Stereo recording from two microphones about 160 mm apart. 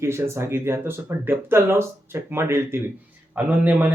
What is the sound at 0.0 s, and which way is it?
A man's voice, 15° right (ahead or behind).